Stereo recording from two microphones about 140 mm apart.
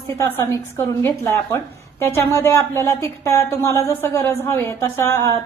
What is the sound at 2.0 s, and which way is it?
A woman's voice, 20° left (ahead or behind).